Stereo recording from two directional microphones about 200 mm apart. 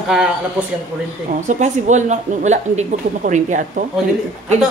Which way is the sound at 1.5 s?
35° right (ahead or behind).